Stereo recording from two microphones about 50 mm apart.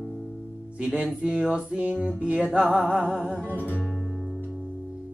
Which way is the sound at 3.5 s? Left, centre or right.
Right.